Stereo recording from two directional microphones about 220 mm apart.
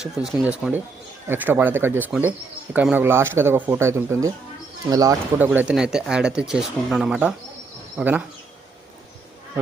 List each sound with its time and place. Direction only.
0.0 s speech: centre (ahead or behind)
5.5 s speech: 5° right (ahead or behind)